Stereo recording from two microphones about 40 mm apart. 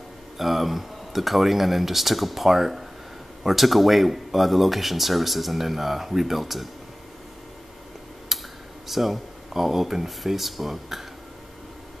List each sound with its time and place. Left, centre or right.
0.4 s speech: centre
8.3 s clicking: centre
8.8 s speech: centre